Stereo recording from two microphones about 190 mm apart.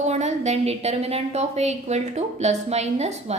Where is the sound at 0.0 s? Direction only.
35° right (ahead or behind).